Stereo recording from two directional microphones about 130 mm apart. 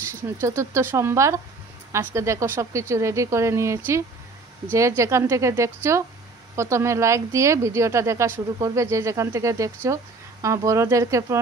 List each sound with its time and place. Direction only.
0.1 s speech: 20° right (ahead or behind)